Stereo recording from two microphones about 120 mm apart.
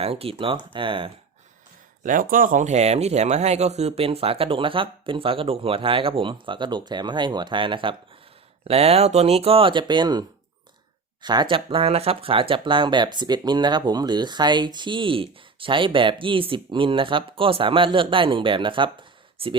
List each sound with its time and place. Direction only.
0.0 s speech: 55° right (ahead or behind)
2.0 s speech: 90° right; by 7.9 s 45° right (ahead or behind)
8.6 s speech: 60° right (ahead or behind)